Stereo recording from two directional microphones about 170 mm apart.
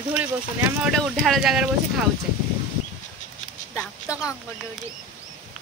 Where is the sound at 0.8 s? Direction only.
Centre (ahead or behind).